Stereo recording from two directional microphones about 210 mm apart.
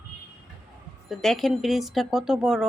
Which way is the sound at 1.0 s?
Centre (ahead or behind).